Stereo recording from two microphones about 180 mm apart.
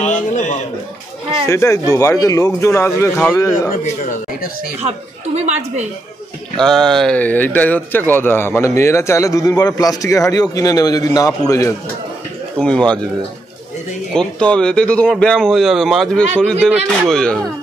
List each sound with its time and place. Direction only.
0.0 s a sound: 45° left (ahead or behind)
1.4 s a man's voice: 15° left (ahead or behind)
4.8 s speech: 40° right (ahead or behind)
6.6 s a man's voice: 5° left (ahead or behind); by 11.7 s 20° left (ahead or behind)
12.5 s speech: 5° left (ahead or behind)
14.1 s speech: 5° left (ahead or behind)